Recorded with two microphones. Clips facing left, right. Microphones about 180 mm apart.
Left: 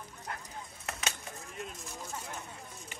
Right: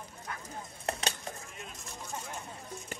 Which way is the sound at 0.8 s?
35° right (ahead or behind).